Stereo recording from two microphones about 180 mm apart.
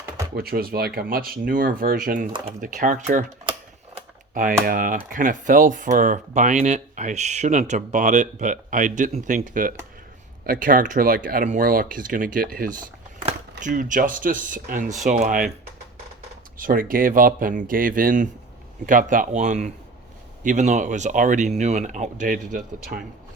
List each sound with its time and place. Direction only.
0.3 s speech: 60° right (ahead or behind)
4.6 s speech: 50° right (ahead or behind)
16.6 s speech: 50° right (ahead or behind)